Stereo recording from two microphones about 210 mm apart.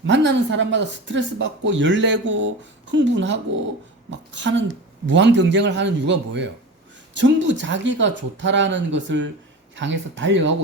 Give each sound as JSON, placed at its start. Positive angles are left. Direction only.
{"t": 0.0, "sound": "speech", "side_deg": -60}